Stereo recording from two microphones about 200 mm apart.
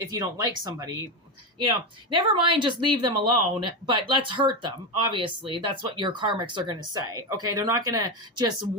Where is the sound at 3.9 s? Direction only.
25° right (ahead or behind).